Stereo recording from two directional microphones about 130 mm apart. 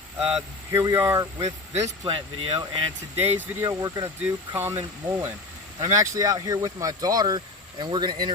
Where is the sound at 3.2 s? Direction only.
15° right (ahead or behind).